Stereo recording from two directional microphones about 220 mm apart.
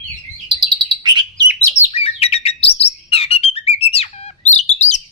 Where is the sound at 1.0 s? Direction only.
20° right (ahead or behind).